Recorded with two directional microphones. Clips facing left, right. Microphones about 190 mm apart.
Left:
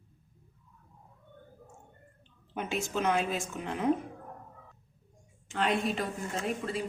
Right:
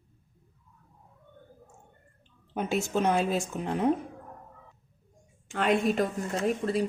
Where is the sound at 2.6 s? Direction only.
35° right (ahead or behind).